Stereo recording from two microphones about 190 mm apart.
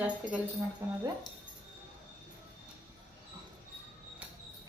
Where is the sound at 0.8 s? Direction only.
15° right (ahead or behind).